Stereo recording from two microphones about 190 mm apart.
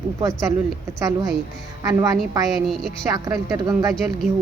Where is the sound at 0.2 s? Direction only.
20° right (ahead or behind).